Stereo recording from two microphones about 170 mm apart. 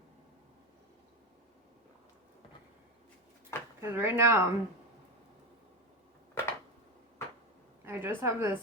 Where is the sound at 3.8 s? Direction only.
15° right (ahead or behind).